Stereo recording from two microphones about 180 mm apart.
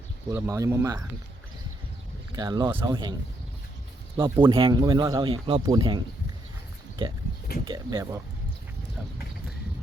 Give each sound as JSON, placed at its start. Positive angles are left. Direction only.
{"t": 0.3, "sound": "speech", "side_deg": -15}
{"t": 2.3, "sound": "speech", "side_deg": -25}
{"t": 4.2, "sound": "speech", "side_deg": -25}
{"t": 7.7, "sound": "speech", "side_deg": -20}